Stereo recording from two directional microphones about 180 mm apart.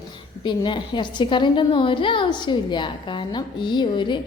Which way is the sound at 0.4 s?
25° left (ahead or behind).